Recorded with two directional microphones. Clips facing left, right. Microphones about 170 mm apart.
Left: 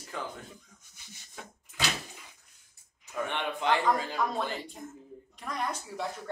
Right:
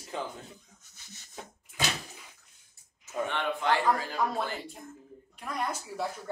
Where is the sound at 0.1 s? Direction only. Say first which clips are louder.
Right 2 dB; 25° right (ahead or behind).